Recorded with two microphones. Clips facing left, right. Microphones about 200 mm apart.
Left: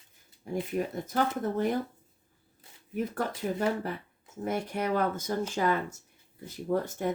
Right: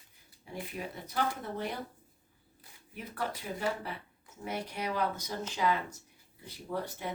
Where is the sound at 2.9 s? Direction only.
45° left (ahead or behind).